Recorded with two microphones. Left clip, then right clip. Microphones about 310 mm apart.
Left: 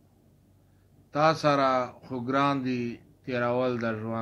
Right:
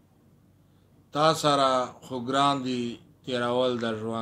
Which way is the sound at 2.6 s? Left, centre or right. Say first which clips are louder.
Right 1 dB; right.